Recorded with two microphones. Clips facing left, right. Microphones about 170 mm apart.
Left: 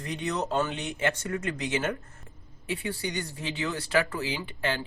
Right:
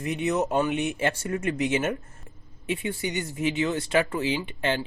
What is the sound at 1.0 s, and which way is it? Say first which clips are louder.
Speech: right 3 dB; 30° right (ahead or behind).